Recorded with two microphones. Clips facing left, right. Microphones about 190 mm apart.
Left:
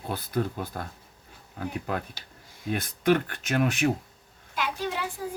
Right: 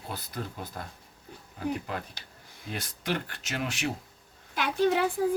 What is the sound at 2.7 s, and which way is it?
Speech, 55° left (ahead or behind).